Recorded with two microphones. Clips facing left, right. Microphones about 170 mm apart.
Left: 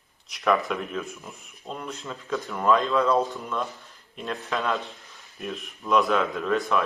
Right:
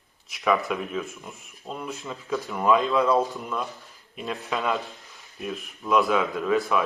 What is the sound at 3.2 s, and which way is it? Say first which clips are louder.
Speech: even; centre (ahead or behind).